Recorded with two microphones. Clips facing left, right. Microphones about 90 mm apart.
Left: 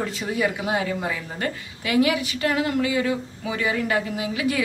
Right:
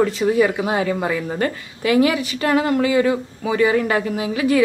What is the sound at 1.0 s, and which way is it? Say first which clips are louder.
Speech: right 7 dB; 65° right (ahead or behind).